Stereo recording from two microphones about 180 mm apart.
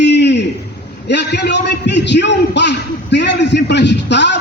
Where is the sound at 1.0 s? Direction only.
70° left (ahead or behind).